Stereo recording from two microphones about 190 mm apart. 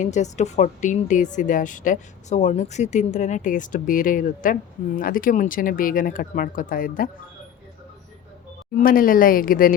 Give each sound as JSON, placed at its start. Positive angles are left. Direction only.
{"t": 0.0, "sound": "speech", "side_deg": 40}
{"t": 8.8, "sound": "speech", "side_deg": 45}